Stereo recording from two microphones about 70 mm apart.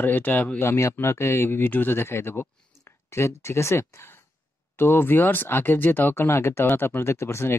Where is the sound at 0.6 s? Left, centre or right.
Left.